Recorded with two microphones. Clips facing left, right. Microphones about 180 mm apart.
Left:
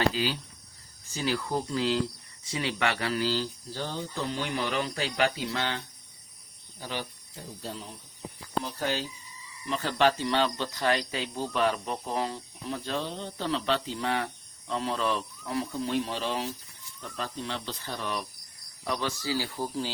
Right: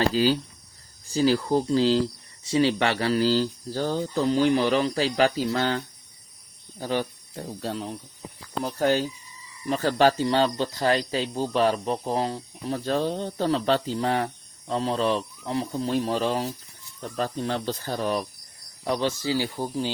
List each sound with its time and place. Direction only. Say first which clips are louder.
0.1 s speech: right 9 dB; 40° right (ahead or behind)
6.7 s cricket: right 9 dB; 45° right (ahead or behind)
7.6 s speech: right 8 dB; 75° right (ahead or behind)
8.6 s speech: right 12 dB; 45° right (ahead or behind)
18.9 s speech: right 6 dB; 30° right (ahead or behind)